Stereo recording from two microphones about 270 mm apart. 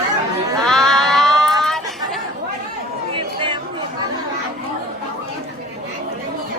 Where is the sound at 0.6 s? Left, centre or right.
Centre.